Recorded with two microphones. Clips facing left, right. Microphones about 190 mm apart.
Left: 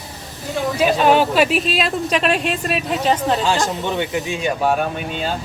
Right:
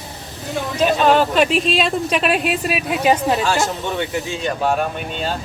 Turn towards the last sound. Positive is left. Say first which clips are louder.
# left 1 dB
turn(degrees=10)  # may be behind; listen again after turning